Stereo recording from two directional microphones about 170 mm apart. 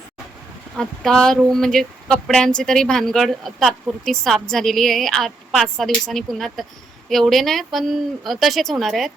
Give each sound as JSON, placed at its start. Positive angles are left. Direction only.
{"t": 0.8, "sound": "speech", "side_deg": 5}